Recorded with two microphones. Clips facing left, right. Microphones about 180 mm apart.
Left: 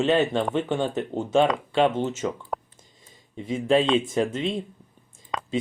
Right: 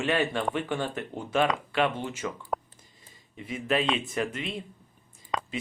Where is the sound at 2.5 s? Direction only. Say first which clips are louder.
Even; centre (ahead or behind).